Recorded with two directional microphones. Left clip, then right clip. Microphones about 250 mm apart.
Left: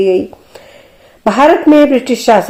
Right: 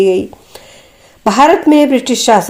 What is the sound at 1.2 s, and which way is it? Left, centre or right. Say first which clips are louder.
Speech: even; right.